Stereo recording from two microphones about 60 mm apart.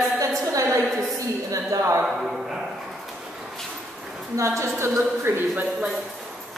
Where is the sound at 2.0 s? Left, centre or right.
Centre.